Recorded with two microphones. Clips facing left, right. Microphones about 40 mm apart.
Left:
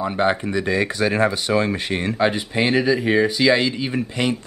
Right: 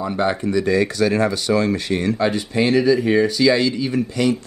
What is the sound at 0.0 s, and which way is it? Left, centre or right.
Speech, centre.